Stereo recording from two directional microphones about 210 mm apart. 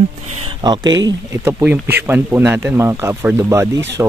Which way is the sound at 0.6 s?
20° right (ahead or behind).